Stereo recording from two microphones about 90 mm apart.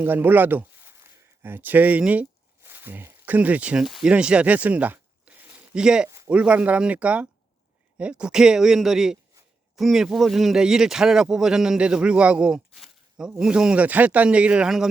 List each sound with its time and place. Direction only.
0.0 s speech: 20° right (ahead or behind)
3.8 s speech: 5° right (ahead or behind)